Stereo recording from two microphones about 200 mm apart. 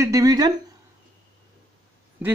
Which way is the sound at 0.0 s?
15° right (ahead or behind).